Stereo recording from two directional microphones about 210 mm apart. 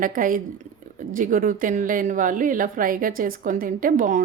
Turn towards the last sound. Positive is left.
turn(degrees=-40)  # may be behind; listen again after turning